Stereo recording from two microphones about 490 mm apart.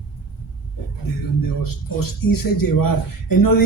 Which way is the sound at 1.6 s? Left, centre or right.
Left.